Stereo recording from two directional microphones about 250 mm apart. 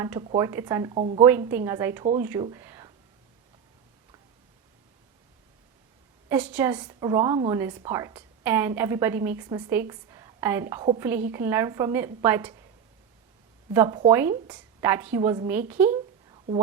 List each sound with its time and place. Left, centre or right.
0.0 s a woman's voice: centre
0.9 s a woman's voice: right
1.2 s a woman's voice: centre
6.2 s a woman's voice: centre
13.7 s a woman's voice: centre